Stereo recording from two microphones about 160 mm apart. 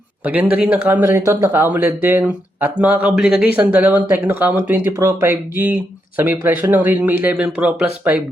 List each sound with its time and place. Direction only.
0.5 s speech: 10° right (ahead or behind)